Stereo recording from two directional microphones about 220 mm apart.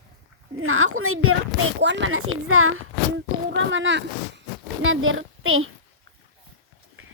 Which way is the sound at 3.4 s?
60° right (ahead or behind).